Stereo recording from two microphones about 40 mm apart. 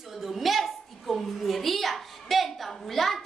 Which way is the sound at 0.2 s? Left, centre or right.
Centre.